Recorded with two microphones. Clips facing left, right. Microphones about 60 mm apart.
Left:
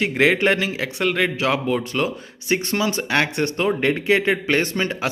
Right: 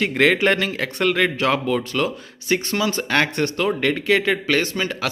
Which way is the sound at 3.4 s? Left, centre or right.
Left.